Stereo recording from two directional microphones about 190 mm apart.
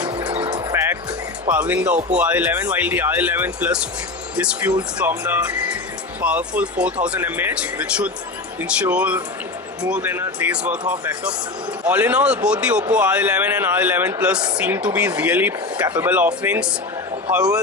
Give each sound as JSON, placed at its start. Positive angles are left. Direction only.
{"t": 0.1, "sound": "music", "side_deg": -25}
{"t": 0.7, "sound": "music", "side_deg": -10}
{"t": 1.5, "sound": "speech", "side_deg": -10}